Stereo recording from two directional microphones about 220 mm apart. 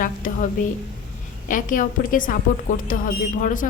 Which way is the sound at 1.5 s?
35° left (ahead or behind).